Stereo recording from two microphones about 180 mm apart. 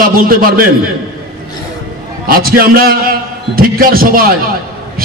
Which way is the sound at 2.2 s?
55° right (ahead or behind).